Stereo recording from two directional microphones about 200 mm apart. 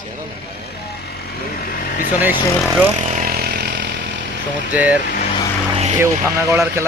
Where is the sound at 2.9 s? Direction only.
35° right (ahead or behind); by 3.9 s 55° right (ahead or behind).